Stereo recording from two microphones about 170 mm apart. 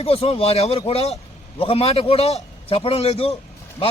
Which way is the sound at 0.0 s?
35° left (ahead or behind).